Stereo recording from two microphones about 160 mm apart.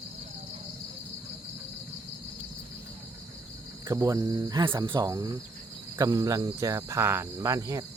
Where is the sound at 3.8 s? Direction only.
20° right (ahead or behind).